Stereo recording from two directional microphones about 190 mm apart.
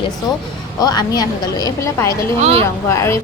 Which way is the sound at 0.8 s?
20° left (ahead or behind).